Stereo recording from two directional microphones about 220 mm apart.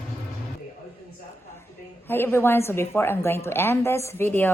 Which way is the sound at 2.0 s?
10° left (ahead or behind).